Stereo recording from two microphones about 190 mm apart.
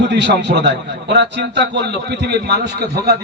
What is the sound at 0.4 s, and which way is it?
A man's voice, 65° right (ahead or behind).